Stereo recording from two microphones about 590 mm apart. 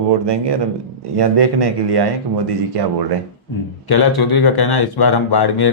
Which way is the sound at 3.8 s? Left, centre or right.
Left.